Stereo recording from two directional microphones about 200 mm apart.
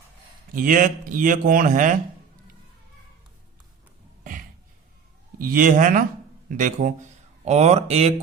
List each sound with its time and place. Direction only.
0.5 s speech: 45° right (ahead or behind)
5.4 s speech: 45° right (ahead or behind)